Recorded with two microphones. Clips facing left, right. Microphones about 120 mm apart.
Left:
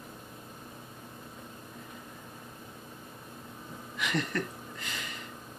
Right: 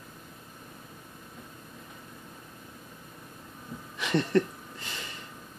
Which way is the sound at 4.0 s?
30° right (ahead or behind).